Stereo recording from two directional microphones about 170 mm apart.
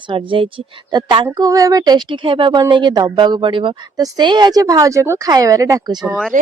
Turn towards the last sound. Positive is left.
turn(degrees=-50)  # may be behind; listen again after turning